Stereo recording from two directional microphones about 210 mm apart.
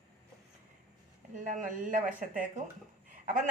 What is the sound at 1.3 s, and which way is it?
A woman's voice, 35° right (ahead or behind).